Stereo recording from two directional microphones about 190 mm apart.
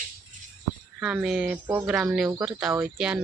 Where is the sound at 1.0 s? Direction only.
5° right (ahead or behind).